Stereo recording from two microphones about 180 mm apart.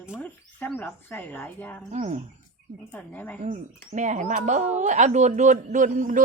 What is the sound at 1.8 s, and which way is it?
Speech, 40° right (ahead or behind).